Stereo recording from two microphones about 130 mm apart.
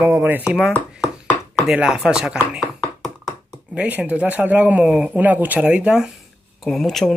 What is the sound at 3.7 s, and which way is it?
Speech, 10° right (ahead or behind).